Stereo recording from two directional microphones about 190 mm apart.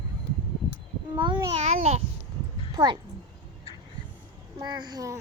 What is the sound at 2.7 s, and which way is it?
Speech, 20° right (ahead or behind).